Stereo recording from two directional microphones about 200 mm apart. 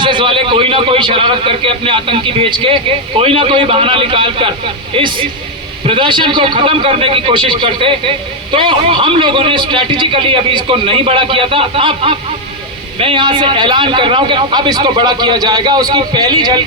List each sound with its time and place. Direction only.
0.0 s a man's voice: 25° right (ahead or behind)